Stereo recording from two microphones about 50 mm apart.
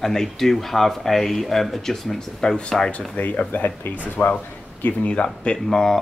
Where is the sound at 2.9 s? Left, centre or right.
Left.